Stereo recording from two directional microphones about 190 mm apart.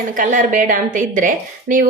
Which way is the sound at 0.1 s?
40° right (ahead or behind).